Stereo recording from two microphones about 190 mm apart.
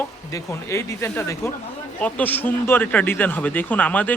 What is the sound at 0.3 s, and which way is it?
Speech, 15° left (ahead or behind).